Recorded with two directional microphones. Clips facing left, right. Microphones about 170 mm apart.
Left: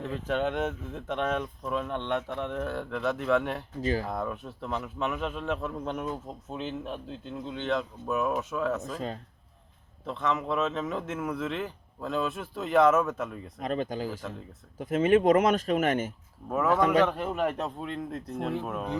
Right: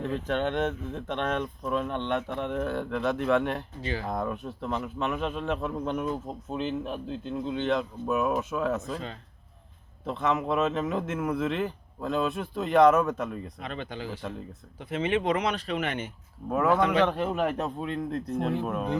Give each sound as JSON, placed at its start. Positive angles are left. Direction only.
{"t": 0.0, "sound": "speech", "side_deg": 5}
{"t": 3.8, "sound": "speech", "side_deg": 40}
{"t": 4.1, "sound": "speech", "side_deg": 0}
{"t": 8.8, "sound": "speech", "side_deg": 40}
{"t": 10.1, "sound": "speech", "side_deg": 0}
{"t": 13.6, "sound": "speech", "side_deg": 40}
{"t": 16.5, "sound": "speech", "side_deg": 0}